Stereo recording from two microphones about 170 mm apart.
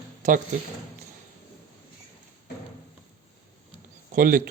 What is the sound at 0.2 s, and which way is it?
Speech, 50° right (ahead or behind).